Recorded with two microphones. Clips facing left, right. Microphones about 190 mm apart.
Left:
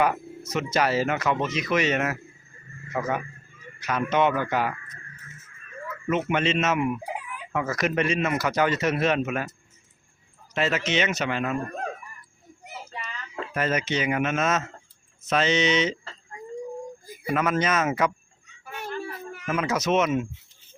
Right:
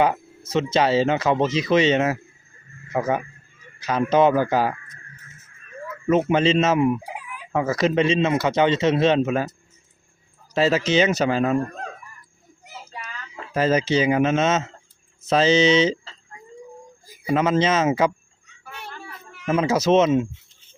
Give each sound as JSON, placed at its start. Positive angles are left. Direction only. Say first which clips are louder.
{"t": 0.0, "sound": "a man's voice", "louder": "right 3 dB", "side_deg": -25}
{"t": 6.1, "sound": "speech", "louder": "right 6 dB", "side_deg": -35}
{"t": 10.5, "sound": "speech", "louder": "right 6 dB", "side_deg": -30}
{"t": 13.5, "sound": "speech", "louder": "right 7 dB", "side_deg": -30}
{"t": 17.2, "sound": "speech", "louder": "right 5 dB", "side_deg": -25}
{"t": 19.0, "sound": "a sound", "louder": "left 7 dB", "side_deg": 45}
{"t": 19.5, "sound": "speech", "louder": "right 6 dB", "side_deg": -30}